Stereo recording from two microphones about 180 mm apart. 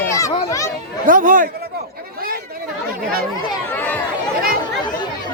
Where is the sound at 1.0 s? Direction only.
50° right (ahead or behind).